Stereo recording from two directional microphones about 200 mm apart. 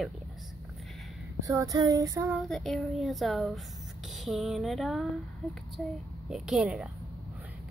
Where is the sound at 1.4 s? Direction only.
15° right (ahead or behind).